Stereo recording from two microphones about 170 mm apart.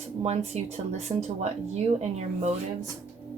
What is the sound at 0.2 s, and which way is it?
Speech, 40° right (ahead or behind).